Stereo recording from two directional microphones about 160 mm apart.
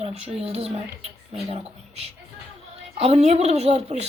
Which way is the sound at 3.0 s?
40° right (ahead or behind).